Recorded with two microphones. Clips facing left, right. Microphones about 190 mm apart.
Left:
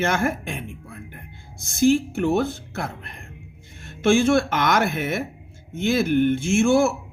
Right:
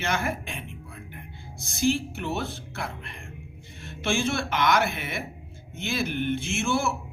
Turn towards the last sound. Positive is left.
turn(degrees=45)  # may be behind; listen again after turning